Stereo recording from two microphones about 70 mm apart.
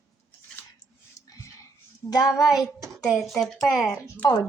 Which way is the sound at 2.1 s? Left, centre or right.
Left.